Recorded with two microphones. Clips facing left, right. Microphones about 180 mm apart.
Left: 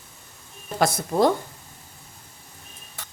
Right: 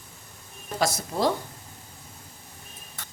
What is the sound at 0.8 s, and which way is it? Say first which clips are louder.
Speech: left 5 dB; 55° left (ahead or behind).